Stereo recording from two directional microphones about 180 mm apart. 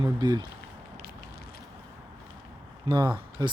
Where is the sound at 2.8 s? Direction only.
25° right (ahead or behind).